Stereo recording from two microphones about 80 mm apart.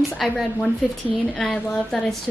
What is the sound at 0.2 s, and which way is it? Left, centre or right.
A woman's voice, centre.